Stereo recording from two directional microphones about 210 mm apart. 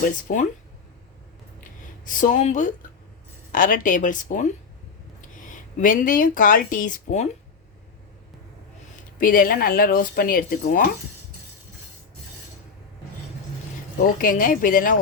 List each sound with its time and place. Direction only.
0.3 s speech: 40° left (ahead or behind)
1.6 s a sound: 40° left (ahead or behind)
3.5 s speech: 40° left (ahead or behind)
9.2 s speech: 40° left (ahead or behind)
14.0 s speech: 40° left (ahead or behind)